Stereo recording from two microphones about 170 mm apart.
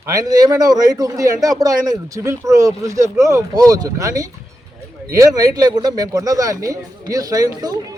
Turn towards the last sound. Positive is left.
turn(degrees=-20)  # may be behind; listen again after turning